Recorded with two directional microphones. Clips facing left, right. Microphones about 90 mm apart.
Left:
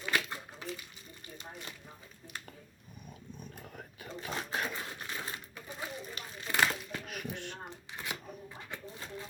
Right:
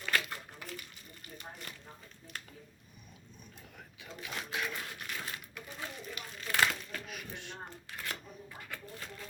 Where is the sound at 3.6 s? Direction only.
45° left (ahead or behind).